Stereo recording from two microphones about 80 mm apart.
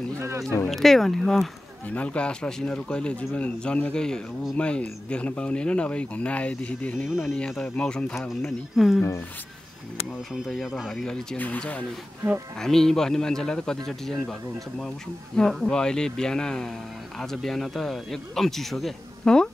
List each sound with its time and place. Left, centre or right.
0.7 s speech: centre
1.9 s speech: centre
7.1 s speech: centre
7.7 s speech: centre
10.3 s speech: centre
11.3 s speech: left
12.5 s speech: centre
15.3 s speech: centre